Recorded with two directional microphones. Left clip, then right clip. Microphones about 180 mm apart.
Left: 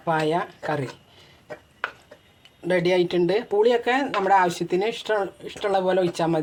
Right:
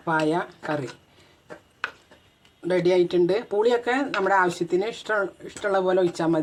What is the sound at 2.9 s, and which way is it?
Speech, 15° left (ahead or behind).